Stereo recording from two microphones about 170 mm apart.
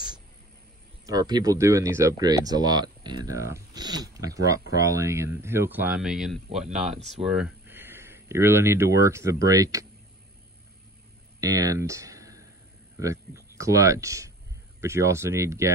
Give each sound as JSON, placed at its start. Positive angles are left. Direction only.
{"t": 1.0, "sound": "speech", "side_deg": -25}
{"t": 11.4, "sound": "speech", "side_deg": -20}